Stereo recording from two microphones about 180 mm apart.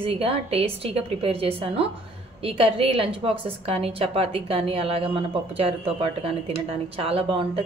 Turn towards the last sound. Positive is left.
turn(degrees=-30)  # may be behind; listen again after turning